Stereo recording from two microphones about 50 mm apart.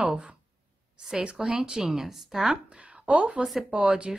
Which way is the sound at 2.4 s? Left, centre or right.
Right.